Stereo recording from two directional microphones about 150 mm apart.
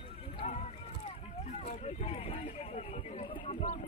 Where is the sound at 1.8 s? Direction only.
40° left (ahead or behind).